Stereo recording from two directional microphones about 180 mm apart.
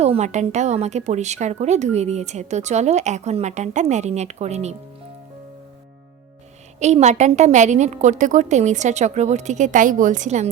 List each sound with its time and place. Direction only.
0.0 s a woman's voice: 40° right (ahead or behind)
6.7 s a woman's voice: 40° right (ahead or behind)